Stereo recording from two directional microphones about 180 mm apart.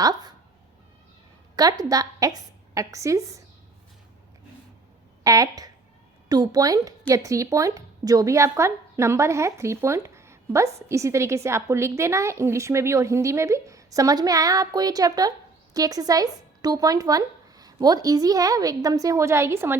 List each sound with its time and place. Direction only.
0.0 s speech: 20° right (ahead or behind)
1.8 s a woman's voice: 20° right (ahead or behind)
5.2 s a woman's voice: 20° right (ahead or behind)